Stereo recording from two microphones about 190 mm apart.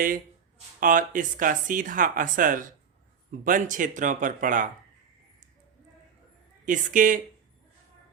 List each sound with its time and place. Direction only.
0.8 s speech: 45° right (ahead or behind)
6.7 s speech: 45° right (ahead or behind)